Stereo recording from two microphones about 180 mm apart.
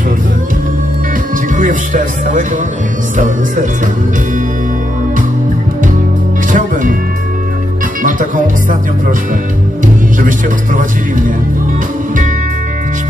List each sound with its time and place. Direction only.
1.5 s speech: 45° right (ahead or behind)
6.5 s music: 50° right (ahead or behind)
8.0 s music: 50° right (ahead or behind)
10.2 s speech: 45° right (ahead or behind)